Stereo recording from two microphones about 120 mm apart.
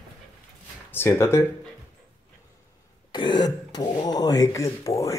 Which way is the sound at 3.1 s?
40° left (ahead or behind).